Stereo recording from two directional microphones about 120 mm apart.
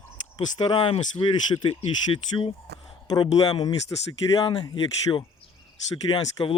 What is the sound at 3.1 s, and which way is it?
Speech, 35° left (ahead or behind).